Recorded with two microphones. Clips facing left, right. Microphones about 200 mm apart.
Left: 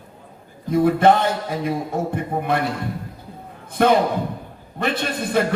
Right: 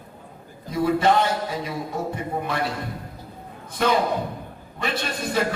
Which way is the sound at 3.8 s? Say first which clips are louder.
Left 5 dB; 55° left (ahead or behind).